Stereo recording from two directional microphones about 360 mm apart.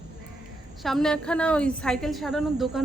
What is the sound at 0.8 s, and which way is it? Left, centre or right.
A woman's voice, centre.